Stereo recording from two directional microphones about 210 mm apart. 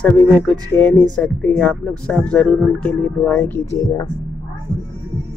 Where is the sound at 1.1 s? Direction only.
5° left (ahead or behind).